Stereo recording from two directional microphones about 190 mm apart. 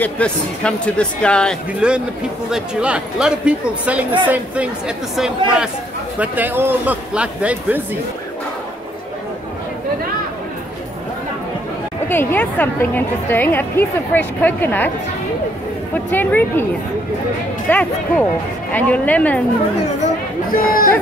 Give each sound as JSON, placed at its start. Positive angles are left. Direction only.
{"t": 0.0, "sound": "a man's voice", "side_deg": 5}
{"t": 12.1, "sound": "a woman's voice", "side_deg": 10}
{"t": 16.1, "sound": "a woman's voice", "side_deg": 10}
{"t": 17.6, "sound": "a woman's voice", "side_deg": 5}
{"t": 20.5, "sound": "speech", "side_deg": 50}